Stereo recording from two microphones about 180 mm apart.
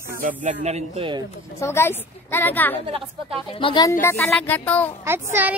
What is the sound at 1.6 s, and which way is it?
A woman's voice, 15° left (ahead or behind).